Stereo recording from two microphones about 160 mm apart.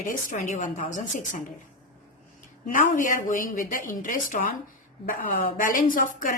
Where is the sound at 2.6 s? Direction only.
55° left (ahead or behind).